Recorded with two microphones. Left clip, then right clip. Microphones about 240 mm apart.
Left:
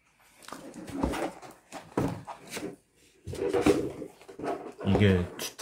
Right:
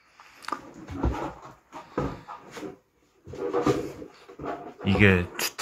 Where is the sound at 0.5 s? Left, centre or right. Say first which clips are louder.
Right 10 dB; centre.